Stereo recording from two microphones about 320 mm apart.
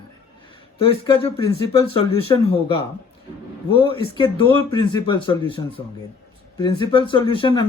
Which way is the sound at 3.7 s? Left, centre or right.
Centre.